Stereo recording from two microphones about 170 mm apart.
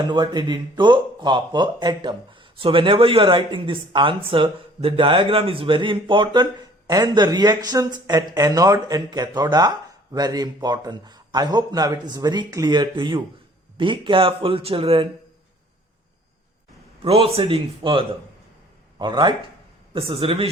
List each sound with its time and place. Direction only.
0.1 s speech: 25° right (ahead or behind)
17.0 s speech: 35° right (ahead or behind)